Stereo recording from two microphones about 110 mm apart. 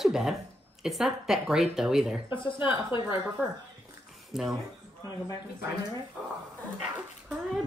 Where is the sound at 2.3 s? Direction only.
50° left (ahead or behind).